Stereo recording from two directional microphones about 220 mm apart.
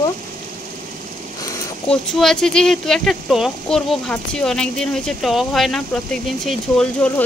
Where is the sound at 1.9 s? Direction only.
Centre (ahead or behind).